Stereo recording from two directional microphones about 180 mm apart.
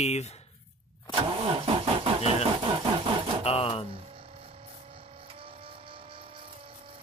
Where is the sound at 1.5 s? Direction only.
30° right (ahead or behind).